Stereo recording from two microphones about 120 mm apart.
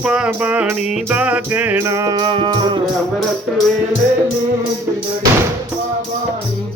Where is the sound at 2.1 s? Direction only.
45° right (ahead or behind).